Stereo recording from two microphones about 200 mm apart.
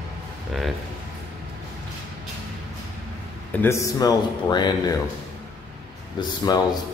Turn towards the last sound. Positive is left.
turn(degrees=20)  # may be behind; listen again after turning